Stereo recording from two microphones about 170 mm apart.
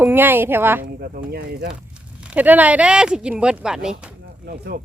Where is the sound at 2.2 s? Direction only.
10° right (ahead or behind).